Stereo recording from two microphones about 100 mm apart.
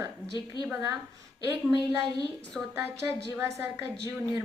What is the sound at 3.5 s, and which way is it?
Speech, 30° right (ahead or behind).